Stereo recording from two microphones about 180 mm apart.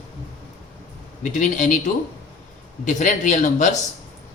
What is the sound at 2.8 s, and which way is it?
Speech, 45° left (ahead or behind).